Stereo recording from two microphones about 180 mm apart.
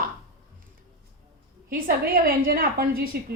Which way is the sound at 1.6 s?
55° right (ahead or behind).